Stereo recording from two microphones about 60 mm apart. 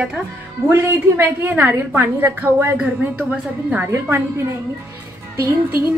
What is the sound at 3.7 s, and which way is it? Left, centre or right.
Speech, right.